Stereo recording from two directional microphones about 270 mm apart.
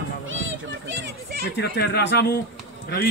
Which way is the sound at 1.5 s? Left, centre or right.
Left.